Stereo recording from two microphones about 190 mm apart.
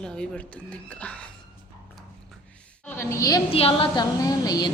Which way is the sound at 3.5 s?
30° left (ahead or behind).